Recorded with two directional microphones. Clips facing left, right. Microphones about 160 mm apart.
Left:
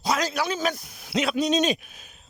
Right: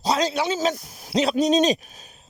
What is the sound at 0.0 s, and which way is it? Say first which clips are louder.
Speech: right 3 dB; 30° right (ahead or behind).